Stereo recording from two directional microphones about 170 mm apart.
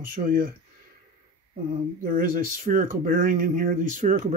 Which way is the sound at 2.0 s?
55° right (ahead or behind).